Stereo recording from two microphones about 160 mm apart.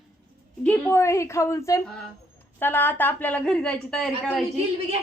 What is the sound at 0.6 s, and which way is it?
Speech, 15° left (ahead or behind).